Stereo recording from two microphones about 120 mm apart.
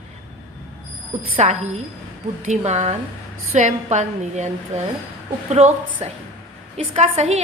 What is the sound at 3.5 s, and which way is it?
A woman's voice, 90° right.